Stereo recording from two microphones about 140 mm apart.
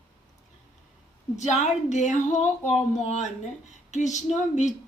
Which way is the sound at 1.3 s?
55° left (ahead or behind).